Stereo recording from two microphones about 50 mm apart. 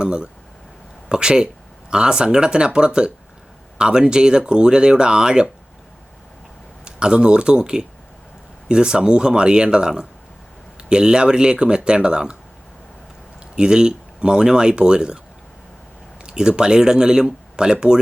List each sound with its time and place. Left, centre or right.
0.0 s speech: centre
6.8 s speech: centre
13.6 s speech: centre
16.2 s speech: centre